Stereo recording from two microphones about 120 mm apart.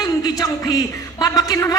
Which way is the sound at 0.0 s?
30° left (ahead or behind).